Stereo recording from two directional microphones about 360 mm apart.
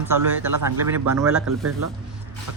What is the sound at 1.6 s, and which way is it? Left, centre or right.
Speech, right.